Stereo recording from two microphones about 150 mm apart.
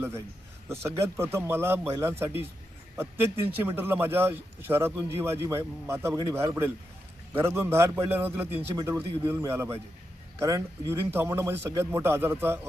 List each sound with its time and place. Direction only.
0.7 s speech: 20° right (ahead or behind)